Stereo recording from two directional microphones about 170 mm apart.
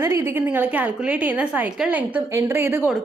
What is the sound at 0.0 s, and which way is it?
A woman's voice, 15° right (ahead or behind).